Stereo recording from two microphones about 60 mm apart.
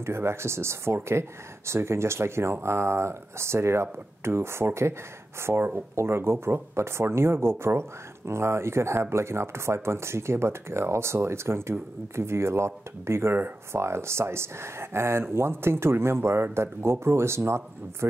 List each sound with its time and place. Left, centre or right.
0.0 s speech: right